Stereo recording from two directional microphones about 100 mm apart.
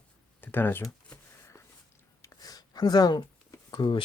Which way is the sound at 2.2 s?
40° left (ahead or behind).